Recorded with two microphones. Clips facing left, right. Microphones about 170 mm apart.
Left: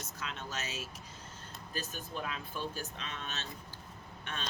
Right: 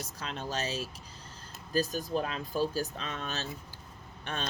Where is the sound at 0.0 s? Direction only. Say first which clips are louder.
Right 4 dB; 35° right (ahead or behind).